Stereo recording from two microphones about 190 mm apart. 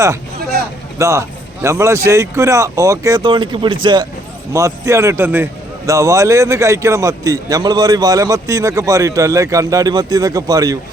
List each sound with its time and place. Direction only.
0.9 s a man's voice: 15° right (ahead or behind)